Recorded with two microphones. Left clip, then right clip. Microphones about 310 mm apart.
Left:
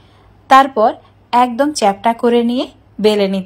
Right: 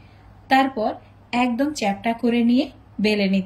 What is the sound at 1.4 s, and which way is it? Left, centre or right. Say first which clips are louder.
Speech: left 7 dB; left.